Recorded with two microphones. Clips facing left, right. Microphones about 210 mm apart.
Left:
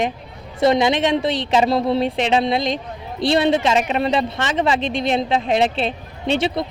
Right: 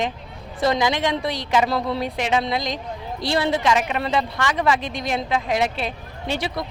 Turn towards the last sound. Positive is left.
turn(degrees=25)  # may be behind; listen again after turning